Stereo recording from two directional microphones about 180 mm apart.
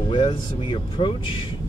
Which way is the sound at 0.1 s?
30° left (ahead or behind).